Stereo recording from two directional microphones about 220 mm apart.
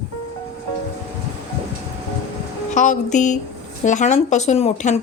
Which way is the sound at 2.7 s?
35° left (ahead or behind).